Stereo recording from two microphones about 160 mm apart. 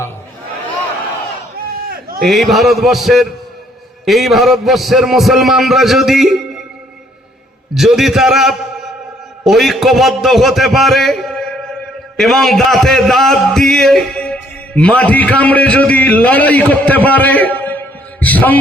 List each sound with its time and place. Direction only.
1.5 s crowd: 70° right (ahead or behind)
2.2 s a man's voice: centre (ahead or behind)
7.7 s a man's voice: centre (ahead or behind)